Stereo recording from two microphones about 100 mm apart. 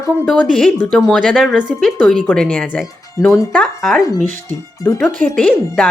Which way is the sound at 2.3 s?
10° left (ahead or behind).